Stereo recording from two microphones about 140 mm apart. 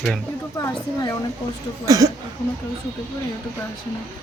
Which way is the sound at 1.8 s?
25° right (ahead or behind).